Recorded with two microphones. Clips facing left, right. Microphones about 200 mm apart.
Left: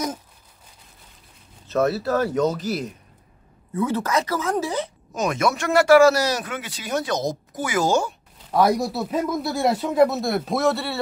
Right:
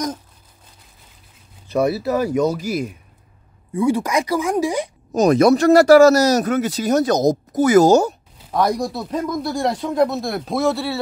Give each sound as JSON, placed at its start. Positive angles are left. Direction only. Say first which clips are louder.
{"t": 1.7, "sound": "speech", "louder": "right 2 dB", "side_deg": -10}
{"t": 5.1, "sound": "speech", "louder": "right 10 dB", "side_deg": -35}
{"t": 8.5, "sound": "speech", "louder": "even", "side_deg": 5}